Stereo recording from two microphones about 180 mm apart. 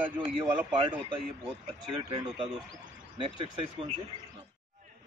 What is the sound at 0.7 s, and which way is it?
Speech, 30° right (ahead or behind).